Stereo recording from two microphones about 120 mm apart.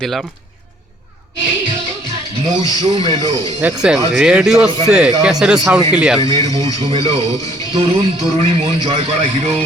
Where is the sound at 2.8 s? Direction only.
40° right (ahead or behind).